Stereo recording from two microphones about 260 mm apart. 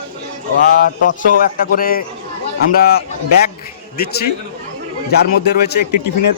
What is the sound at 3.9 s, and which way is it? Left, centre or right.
Speech, left.